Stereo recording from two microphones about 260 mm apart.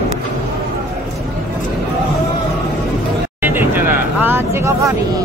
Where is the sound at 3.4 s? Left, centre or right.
Centre.